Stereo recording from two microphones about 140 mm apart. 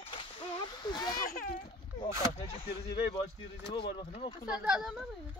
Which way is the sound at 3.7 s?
40° left (ahead or behind).